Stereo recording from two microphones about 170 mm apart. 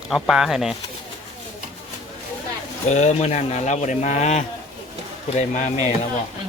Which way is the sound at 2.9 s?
40° left (ahead or behind).